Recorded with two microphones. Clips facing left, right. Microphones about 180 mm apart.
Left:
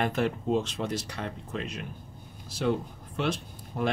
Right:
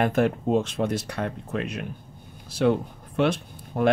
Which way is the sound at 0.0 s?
50° right (ahead or behind).